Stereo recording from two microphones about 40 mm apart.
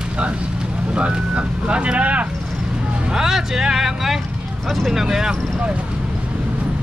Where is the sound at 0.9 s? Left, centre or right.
Right.